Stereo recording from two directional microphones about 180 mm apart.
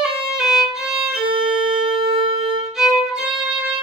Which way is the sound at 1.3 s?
30° right (ahead or behind).